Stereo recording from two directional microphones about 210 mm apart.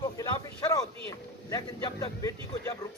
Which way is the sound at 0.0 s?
15° left (ahead or behind).